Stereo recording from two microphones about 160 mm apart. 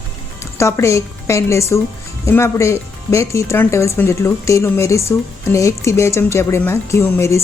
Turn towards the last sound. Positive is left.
turn(degrees=15)  # may be behind; listen again after turning